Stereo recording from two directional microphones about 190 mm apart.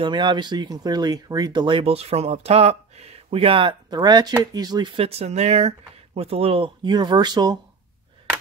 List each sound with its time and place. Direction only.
0.0 s speech: 25° right (ahead or behind)